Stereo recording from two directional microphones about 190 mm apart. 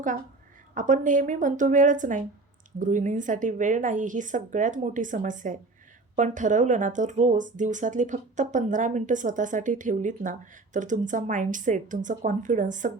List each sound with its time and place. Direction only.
0.7 s a woman's voice: 40° right (ahead or behind)